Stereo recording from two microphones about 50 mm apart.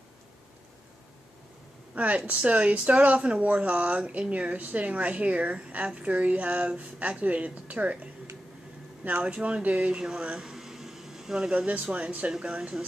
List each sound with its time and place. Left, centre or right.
2.0 s speech: right; by 11.5 s centre
11.5 s speech: right